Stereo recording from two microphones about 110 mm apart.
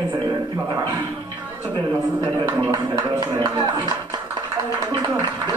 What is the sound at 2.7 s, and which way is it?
Speech, 40° right (ahead or behind).